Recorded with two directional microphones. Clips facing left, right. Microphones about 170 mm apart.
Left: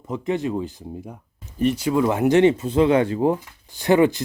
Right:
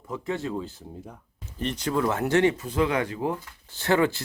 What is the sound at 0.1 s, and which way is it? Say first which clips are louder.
Speech: left 6 dB; 15° left (ahead or behind).